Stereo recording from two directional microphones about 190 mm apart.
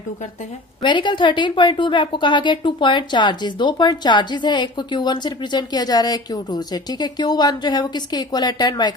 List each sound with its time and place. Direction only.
0.8 s a woman's voice: 25° left (ahead or behind)